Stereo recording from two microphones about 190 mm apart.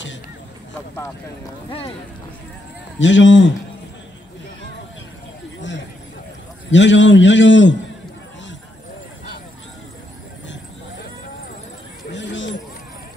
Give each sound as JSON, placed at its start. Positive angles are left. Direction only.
{"t": 1.7, "sound": "speech", "side_deg": 30}
{"t": 3.0, "sound": "a man's voice", "side_deg": 75}
{"t": 6.7, "sound": "a man's voice", "side_deg": 70}
{"t": 12.1, "sound": "a sound", "side_deg": 70}